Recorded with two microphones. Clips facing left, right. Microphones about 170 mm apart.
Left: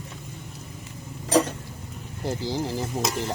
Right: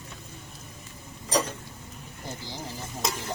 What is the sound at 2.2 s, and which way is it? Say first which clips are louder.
Speech: left 11 dB; 85° left.